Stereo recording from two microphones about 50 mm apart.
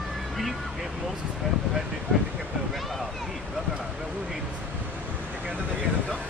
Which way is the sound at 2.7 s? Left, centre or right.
Centre.